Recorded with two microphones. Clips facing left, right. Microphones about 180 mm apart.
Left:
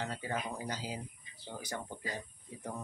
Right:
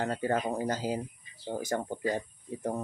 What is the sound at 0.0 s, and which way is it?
Speech, 50° right (ahead or behind).